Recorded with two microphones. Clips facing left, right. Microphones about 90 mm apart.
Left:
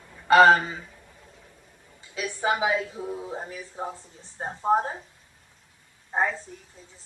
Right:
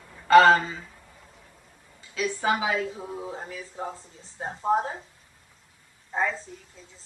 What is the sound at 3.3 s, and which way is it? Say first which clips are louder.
Speech: left 2 dB; 20° left (ahead or behind).